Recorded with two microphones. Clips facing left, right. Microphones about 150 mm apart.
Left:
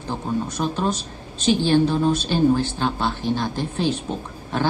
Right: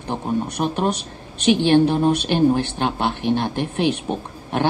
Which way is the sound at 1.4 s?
70° right (ahead or behind).